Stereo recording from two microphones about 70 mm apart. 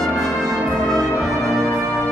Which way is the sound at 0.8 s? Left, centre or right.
Centre.